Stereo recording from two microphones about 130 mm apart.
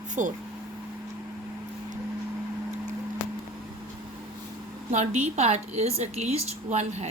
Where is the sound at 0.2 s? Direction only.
75° right (ahead or behind).